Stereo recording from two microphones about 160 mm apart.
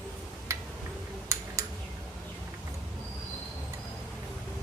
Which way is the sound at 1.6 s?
20° right (ahead or behind).